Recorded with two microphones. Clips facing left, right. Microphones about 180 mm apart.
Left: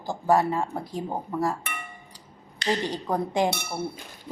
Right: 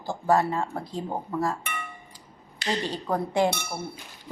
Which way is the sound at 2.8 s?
15° left (ahead or behind).